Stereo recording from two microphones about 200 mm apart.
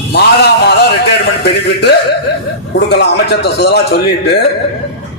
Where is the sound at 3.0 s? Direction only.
55° left (ahead or behind).